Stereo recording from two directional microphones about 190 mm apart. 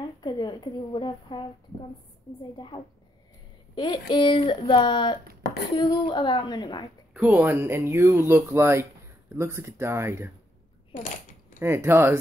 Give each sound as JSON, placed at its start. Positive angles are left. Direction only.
{"t": 0.2, "sound": "a woman's voice", "side_deg": 25}
{"t": 7.2, "sound": "speech", "side_deg": -10}
{"t": 11.0, "sound": "coin", "side_deg": 40}
{"t": 11.6, "sound": "speech", "side_deg": -15}